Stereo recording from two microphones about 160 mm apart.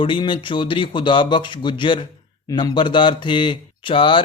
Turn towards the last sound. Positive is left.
turn(degrees=30)  # may be behind; listen again after turning